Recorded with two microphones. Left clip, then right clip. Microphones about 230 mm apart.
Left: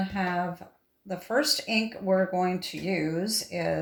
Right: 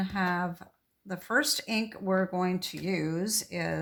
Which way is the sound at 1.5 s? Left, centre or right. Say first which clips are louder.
Left 4 dB; right.